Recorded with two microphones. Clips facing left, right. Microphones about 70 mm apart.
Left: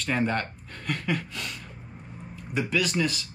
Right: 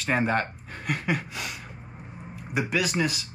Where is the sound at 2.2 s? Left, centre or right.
Centre.